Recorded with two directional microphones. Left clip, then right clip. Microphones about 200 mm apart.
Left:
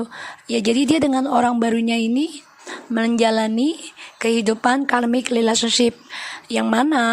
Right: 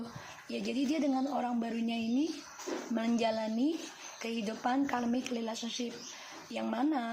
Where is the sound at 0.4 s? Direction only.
45° left (ahead or behind).